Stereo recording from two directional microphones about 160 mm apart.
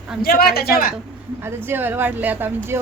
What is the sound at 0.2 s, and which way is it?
Speech, 70° left (ahead or behind).